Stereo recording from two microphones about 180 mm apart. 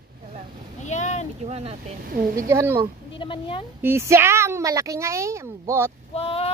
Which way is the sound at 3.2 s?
30° left (ahead or behind).